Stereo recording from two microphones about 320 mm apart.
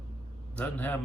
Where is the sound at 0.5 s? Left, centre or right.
Centre.